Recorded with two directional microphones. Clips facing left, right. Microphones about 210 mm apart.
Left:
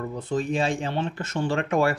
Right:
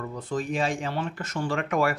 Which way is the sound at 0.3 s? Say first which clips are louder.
Left 2 dB; 25° left (ahead or behind).